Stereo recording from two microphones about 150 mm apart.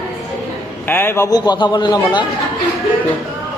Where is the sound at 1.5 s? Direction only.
30° left (ahead or behind).